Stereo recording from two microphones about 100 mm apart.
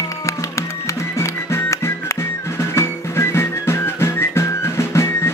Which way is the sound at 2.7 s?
25° left (ahead or behind).